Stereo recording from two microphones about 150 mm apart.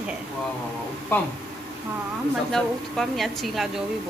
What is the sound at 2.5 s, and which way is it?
A woman's voice, centre (ahead or behind).